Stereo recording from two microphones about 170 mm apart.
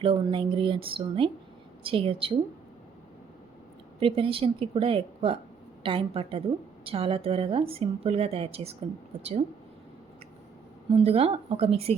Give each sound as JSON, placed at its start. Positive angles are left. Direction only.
{"t": 0.0, "sound": "a woman's voice", "side_deg": -30}
{"t": 4.0, "sound": "a woman's voice", "side_deg": -35}
{"t": 10.9, "sound": "a woman's voice", "side_deg": -35}